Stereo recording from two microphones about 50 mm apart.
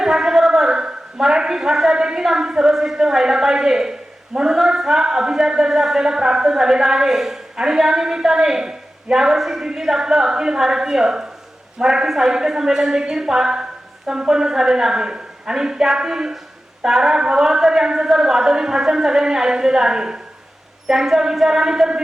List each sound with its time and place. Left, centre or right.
0.0 s a man's voice: centre